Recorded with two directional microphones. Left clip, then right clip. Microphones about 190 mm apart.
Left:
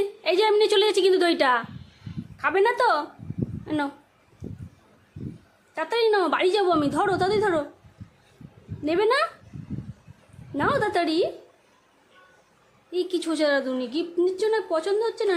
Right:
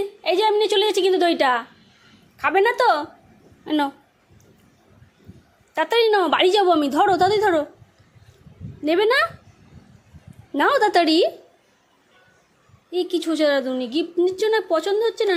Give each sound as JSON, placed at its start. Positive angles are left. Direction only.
{"t": 0.2, "sound": "a woman's voice", "side_deg": -5}
{"t": 5.7, "sound": "a woman's voice", "side_deg": -20}
{"t": 8.8, "sound": "a woman's voice", "side_deg": -15}
{"t": 10.5, "sound": "a woman's voice", "side_deg": -20}
{"t": 12.9, "sound": "a woman's voice", "side_deg": -10}